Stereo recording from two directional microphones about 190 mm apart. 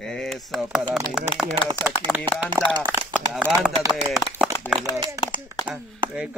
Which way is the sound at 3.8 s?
15° right (ahead or behind).